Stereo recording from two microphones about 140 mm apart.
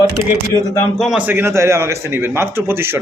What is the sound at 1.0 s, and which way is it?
A man's voice, 5° right (ahead or behind).